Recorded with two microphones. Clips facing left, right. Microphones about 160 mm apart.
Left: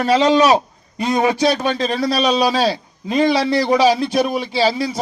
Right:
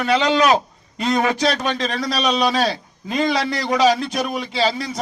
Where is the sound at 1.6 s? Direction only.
30° left (ahead or behind).